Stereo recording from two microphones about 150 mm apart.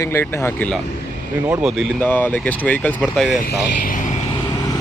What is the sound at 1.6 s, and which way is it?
Speech, 5° right (ahead or behind).